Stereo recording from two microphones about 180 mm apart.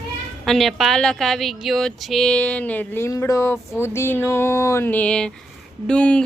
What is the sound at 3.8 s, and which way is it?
Music, 15° left (ahead or behind).